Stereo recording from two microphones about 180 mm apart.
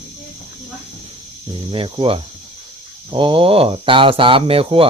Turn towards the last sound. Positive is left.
turn(degrees=-30)  # may be behind; listen again after turning